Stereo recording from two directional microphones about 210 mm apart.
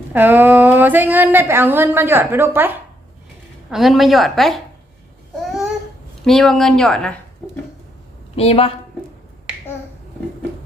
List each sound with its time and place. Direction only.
0.1 s a woman's voice: 10° right (ahead or behind)
5.4 s babbling: centre (ahead or behind)
6.2 s a woman's voice: centre (ahead or behind)
8.4 s a woman's voice: 30° left (ahead or behind)